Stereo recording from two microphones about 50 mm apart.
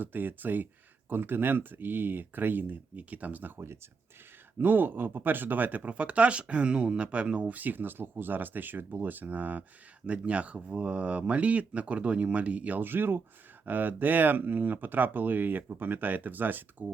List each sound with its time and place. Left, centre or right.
0.0 s speech: right
4.5 s speech: right
12.8 s speech: right